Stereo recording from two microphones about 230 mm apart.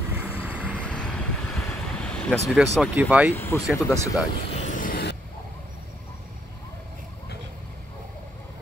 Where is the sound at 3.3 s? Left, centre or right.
Centre.